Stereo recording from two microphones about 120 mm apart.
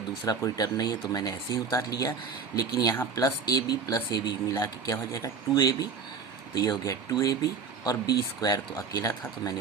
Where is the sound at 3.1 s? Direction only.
30° left (ahead or behind).